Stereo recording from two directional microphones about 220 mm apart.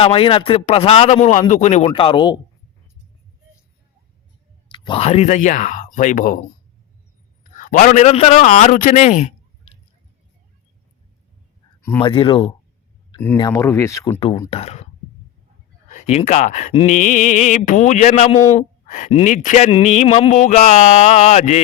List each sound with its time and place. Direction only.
0.0 s speech: 25° left (ahead or behind)
4.7 s speech: 25° left (ahead or behind)
7.5 s speech: 35° left (ahead or behind)
11.9 s speech: 20° left (ahead or behind)
14.2 s speech: 25° left (ahead or behind)
15.9 s speech: 30° left (ahead or behind)